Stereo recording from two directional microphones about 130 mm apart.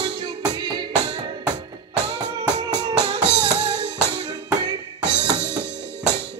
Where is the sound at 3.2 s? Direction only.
20° left (ahead or behind).